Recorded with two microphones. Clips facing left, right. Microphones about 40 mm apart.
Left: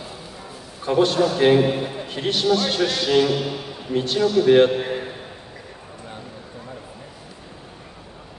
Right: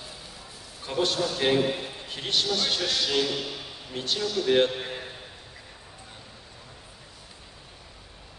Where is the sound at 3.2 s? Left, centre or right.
Left.